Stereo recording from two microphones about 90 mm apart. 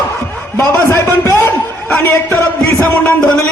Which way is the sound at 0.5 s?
35° left (ahead or behind).